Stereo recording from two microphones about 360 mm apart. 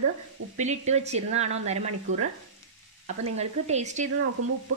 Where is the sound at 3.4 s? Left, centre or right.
Centre.